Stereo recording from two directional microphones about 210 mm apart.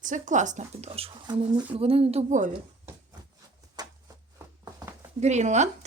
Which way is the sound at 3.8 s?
20° right (ahead or behind).